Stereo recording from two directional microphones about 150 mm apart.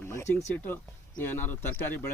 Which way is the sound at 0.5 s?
15° left (ahead or behind).